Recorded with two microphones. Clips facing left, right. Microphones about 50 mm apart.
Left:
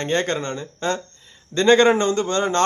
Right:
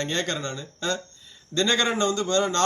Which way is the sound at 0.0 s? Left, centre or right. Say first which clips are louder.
Left 5 dB; left.